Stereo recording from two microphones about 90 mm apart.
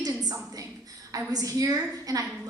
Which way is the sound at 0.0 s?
45° right (ahead or behind).